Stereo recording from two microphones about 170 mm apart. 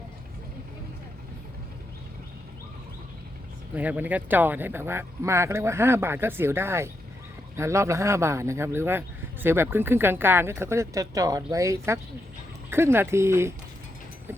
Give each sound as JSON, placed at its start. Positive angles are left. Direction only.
{"t": 3.8, "sound": "speech", "side_deg": -10}